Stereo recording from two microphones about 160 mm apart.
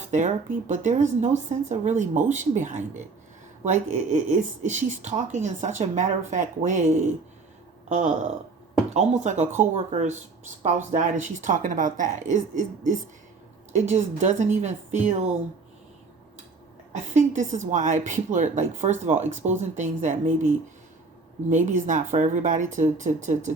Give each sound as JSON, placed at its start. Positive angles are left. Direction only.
{"t": 0.1, "sound": "a woman's voice", "side_deg": -50}
{"t": 8.9, "sound": "a woman's voice", "side_deg": -45}
{"t": 16.9, "sound": "a woman's voice", "side_deg": -50}
{"t": 21.5, "sound": "a woman's voice", "side_deg": -50}